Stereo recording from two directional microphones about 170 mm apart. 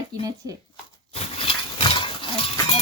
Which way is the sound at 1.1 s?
35° left (ahead or behind).